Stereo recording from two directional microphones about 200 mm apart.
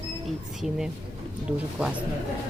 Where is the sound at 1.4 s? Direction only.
5° right (ahead or behind).